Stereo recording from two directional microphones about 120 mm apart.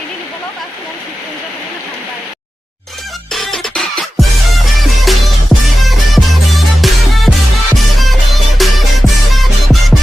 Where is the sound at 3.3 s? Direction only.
Centre (ahead or behind).